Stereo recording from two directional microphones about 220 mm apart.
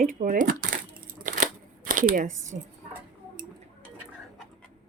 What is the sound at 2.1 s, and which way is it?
Speech, 35° right (ahead or behind).